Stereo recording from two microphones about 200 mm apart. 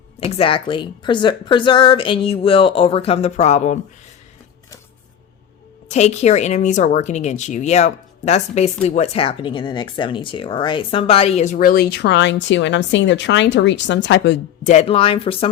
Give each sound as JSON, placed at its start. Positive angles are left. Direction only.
{"t": 0.3, "sound": "speech", "side_deg": 30}
{"t": 5.9, "sound": "speech", "side_deg": 35}
{"t": 14.6, "sound": "speech", "side_deg": 35}